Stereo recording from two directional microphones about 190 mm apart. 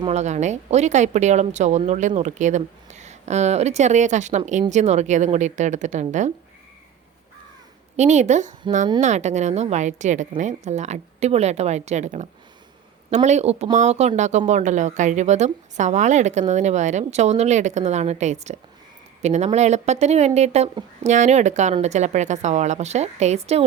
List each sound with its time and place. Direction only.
0.0 s speech: 35° right (ahead or behind)
7.9 s speech: 35° right (ahead or behind)